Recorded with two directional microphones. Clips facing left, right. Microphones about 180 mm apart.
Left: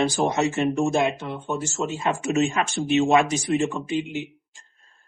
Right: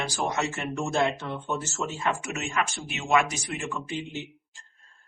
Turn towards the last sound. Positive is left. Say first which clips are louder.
# left 10 dB
turn(degrees=25)  # may be behind; listen again after turning